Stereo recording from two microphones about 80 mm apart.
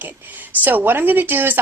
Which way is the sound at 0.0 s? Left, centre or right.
Right.